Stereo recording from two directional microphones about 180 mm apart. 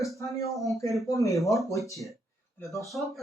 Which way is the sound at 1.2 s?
15° left (ahead or behind).